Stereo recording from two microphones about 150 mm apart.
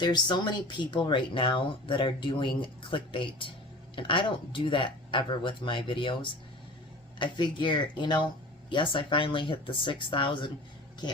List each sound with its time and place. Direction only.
0.0 s speech: 30° left (ahead or behind)
7.2 s speech: 30° left (ahead or behind)